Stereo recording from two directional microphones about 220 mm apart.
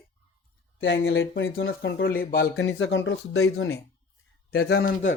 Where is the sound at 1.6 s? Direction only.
45° left (ahead or behind); by 3.8 s 65° left (ahead or behind).